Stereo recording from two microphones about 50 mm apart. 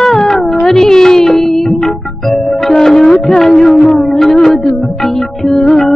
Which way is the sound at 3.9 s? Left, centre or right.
Centre.